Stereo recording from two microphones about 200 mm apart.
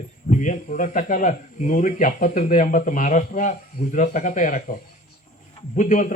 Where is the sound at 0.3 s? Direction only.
40° left (ahead or behind).